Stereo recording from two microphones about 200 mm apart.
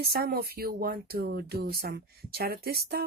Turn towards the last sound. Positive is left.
turn(degrees=-50)  # may be behind; listen again after turning